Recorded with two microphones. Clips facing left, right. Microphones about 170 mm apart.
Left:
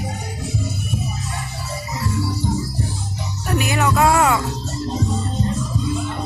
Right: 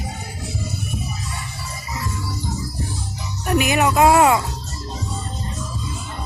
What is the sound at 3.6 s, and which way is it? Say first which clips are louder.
Music: right 2 dB; 20° right (ahead or behind).